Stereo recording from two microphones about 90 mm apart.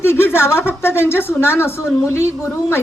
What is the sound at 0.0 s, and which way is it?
Speech, 25° left (ahead or behind).